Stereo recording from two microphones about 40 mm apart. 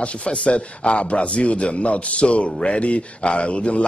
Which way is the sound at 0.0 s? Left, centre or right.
Left.